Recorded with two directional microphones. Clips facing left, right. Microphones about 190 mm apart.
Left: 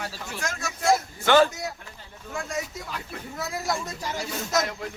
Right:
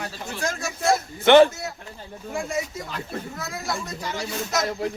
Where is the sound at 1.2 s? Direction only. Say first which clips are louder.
Right 6 dB; 25° right (ahead or behind).